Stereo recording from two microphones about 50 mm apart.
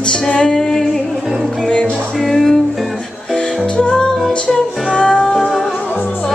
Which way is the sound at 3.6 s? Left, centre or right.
Centre.